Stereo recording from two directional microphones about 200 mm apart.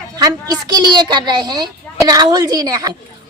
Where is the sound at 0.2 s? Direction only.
20° right (ahead or behind).